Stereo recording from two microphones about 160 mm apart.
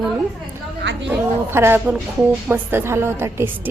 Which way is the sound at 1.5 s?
15° right (ahead or behind).